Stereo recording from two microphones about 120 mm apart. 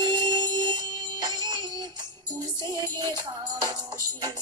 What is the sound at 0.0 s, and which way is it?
Music, 35° right (ahead or behind).